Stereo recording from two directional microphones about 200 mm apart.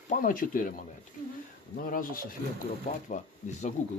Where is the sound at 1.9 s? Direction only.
45° left (ahead or behind).